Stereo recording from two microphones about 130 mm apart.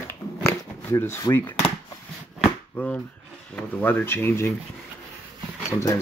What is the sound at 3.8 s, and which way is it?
Speech, 15° left (ahead or behind).